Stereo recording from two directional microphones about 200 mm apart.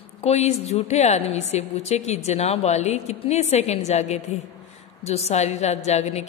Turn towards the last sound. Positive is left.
turn(degrees=35)  # may be behind; listen again after turning